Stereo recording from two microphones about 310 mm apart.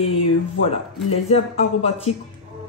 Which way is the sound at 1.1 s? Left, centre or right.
Centre.